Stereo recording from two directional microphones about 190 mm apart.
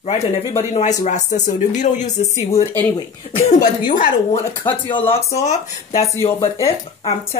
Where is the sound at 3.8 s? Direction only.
45° left (ahead or behind).